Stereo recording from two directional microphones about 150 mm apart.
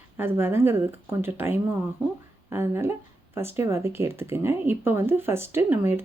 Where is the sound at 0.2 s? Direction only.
15° right (ahead or behind).